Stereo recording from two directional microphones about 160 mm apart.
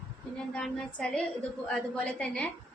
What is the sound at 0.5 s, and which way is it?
A woman's voice, 5° left (ahead or behind).